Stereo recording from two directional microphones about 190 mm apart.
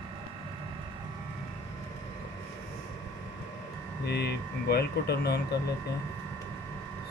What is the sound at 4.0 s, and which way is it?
Speech, 60° left (ahead or behind).